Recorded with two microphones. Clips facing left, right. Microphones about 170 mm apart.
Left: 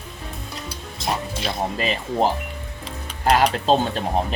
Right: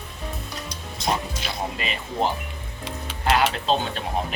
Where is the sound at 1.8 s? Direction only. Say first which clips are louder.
Left 5 dB; 40° left (ahead or behind).